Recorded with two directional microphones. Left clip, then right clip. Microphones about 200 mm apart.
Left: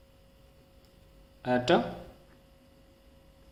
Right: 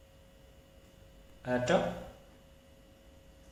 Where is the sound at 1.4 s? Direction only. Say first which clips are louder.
Left 4 dB; 50° left (ahead or behind).